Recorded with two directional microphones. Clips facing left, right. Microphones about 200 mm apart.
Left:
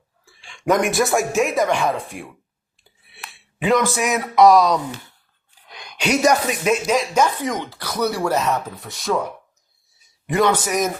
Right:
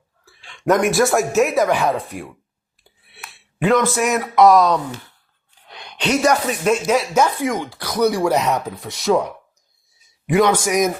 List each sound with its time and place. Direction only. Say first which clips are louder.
0.3 s a sound: right 2 dB; centre (ahead or behind)
0.6 s speech: right 2 dB; centre (ahead or behind)
3.2 s speech: right 2 dB; centre (ahead or behind)
6.0 s speech: even; 10° left (ahead or behind)
6.7 s speech: right 2 dB; 5° right (ahead or behind)
10.2 s speech: right 3 dB; 10° right (ahead or behind)